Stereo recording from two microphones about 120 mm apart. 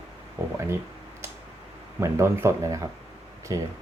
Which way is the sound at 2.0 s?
20° right (ahead or behind).